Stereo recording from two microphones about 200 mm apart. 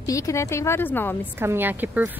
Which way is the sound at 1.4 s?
10° right (ahead or behind).